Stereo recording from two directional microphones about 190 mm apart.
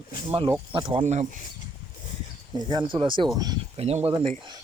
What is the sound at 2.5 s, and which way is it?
Speech, 25° right (ahead or behind).